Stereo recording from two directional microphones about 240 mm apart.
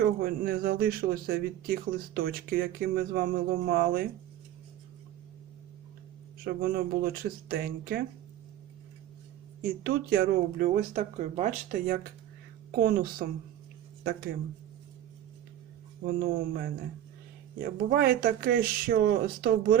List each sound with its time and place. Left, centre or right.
0.0 s speech: right
6.4 s speech: right
9.8 s speech: right
16.0 s speech: right